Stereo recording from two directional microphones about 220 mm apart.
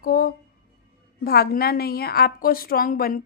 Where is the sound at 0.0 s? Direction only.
40° left (ahead or behind).